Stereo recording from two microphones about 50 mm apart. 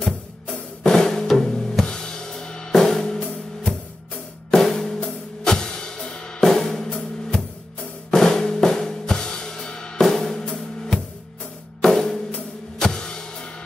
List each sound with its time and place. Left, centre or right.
0.8 s drum: centre
3.0 s music: centre
8.1 s drum kit: centre
10.0 s drum: centre
11.8 s music: centre